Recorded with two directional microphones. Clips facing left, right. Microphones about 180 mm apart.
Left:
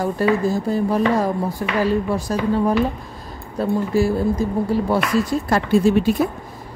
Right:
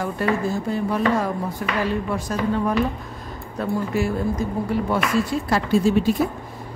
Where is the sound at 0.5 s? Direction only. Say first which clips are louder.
Left 4 dB; 40° left (ahead or behind).